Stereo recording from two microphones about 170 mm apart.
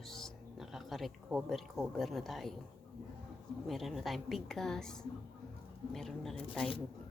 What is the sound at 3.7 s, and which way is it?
A woman's voice, centre (ahead or behind).